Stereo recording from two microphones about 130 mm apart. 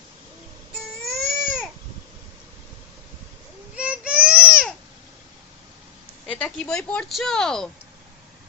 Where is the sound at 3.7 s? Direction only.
10° right (ahead or behind).